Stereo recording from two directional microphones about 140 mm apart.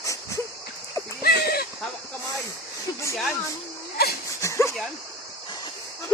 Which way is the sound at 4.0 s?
90° left.